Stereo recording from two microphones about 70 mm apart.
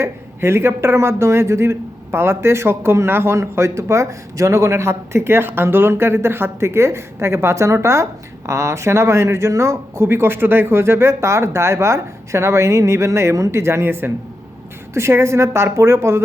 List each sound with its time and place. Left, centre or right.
0.0 s speech: right